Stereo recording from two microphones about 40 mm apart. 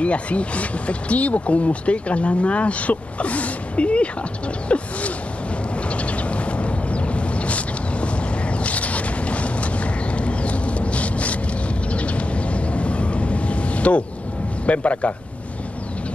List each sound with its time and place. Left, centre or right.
0.0 s speech: left
4.6 s a sound: left
11.9 s vehicle: left
14.7 s speech: left